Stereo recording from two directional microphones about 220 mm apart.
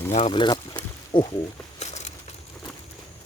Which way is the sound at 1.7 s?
30° left (ahead or behind).